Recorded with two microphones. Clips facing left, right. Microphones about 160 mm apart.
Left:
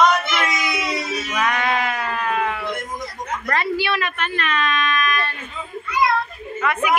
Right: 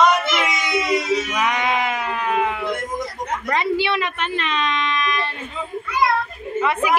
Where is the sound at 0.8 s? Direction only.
15° right (ahead or behind).